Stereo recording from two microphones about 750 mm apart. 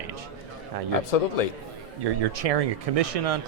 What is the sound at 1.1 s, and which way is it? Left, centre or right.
Speech, left.